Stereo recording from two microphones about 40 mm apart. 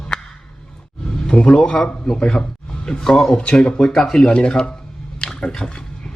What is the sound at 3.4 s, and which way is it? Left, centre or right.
Speech, left.